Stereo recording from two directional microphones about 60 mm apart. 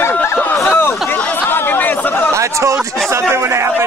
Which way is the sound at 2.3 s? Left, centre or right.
Right.